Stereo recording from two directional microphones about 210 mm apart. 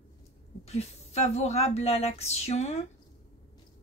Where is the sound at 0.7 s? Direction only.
30° left (ahead or behind).